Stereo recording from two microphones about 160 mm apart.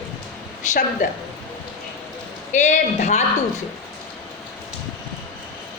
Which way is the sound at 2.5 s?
50° left (ahead or behind).